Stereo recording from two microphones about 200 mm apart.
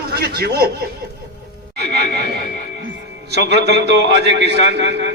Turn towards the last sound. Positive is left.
turn(degrees=-60)  # may be behind; listen again after turning